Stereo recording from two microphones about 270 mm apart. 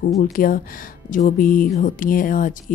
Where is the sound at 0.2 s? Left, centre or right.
Left.